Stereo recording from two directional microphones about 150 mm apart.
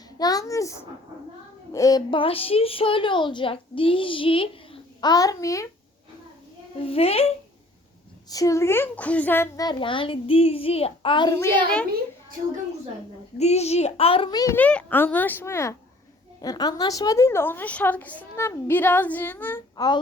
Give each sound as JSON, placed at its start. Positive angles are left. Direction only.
{"t": 0.2, "sound": "a sound", "side_deg": 25}
{"t": 1.7, "sound": "a woman's voice", "side_deg": 25}
{"t": 6.8, "sound": "a woman's voice", "side_deg": 40}
{"t": 8.3, "sound": "a woman's voice", "side_deg": 20}
{"t": 9.6, "sound": "a woman's voice", "side_deg": 35}
{"t": 13.4, "sound": "a woman's voice", "side_deg": 45}
{"t": 14.5, "sound": "a woman's voice", "side_deg": 10}
{"t": 19.7, "sound": "a child's voice", "side_deg": 25}